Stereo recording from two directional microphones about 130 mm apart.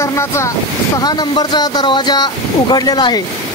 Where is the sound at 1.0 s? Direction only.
30° left (ahead or behind).